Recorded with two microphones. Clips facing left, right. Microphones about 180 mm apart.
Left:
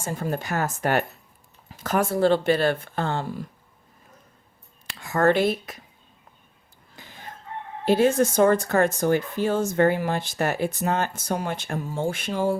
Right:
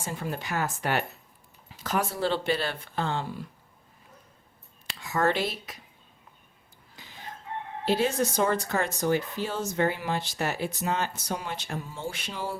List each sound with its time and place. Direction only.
0.0 s speech: 45° left (ahead or behind)
4.9 s speech: 50° left (ahead or behind)
6.9 s chicken: 50° left (ahead or behind)
7.9 s speech: 50° left (ahead or behind)